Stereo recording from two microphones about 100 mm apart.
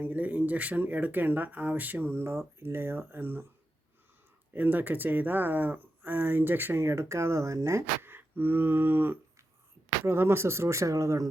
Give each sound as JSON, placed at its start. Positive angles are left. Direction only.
{"t": 0.0, "sound": "speech", "side_deg": -15}
{"t": 4.5, "sound": "speech", "side_deg": -15}